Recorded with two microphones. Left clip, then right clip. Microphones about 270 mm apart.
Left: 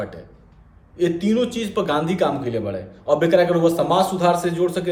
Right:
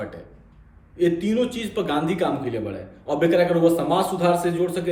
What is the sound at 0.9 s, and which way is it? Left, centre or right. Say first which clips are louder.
A man's voice: left 1 dB; centre.